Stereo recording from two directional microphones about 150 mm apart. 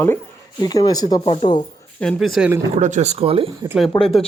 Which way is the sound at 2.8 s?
55° right (ahead or behind).